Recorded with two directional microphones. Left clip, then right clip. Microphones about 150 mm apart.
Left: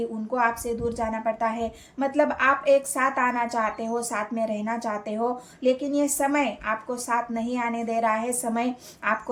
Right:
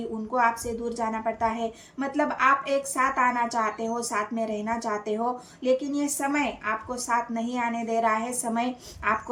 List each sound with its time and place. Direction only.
0.3 s a woman's voice: 40° left (ahead or behind)